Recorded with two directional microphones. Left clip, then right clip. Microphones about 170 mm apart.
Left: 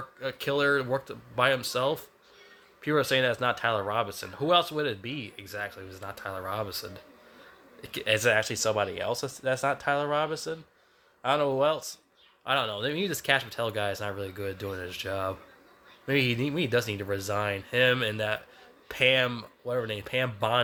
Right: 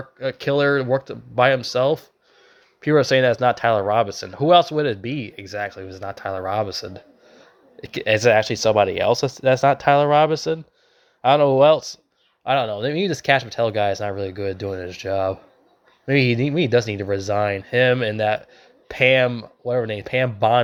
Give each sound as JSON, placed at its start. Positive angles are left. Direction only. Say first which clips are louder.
{"t": 0.2, "sound": "speech", "louder": "right 8 dB", "side_deg": -35}